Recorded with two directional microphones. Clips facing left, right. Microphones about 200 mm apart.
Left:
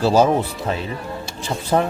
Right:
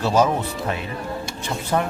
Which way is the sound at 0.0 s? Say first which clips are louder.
Left 3 dB; 30° left (ahead or behind).